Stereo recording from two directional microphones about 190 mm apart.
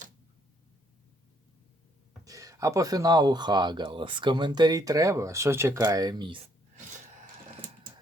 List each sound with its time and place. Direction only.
2.2 s speech: 20° right (ahead or behind)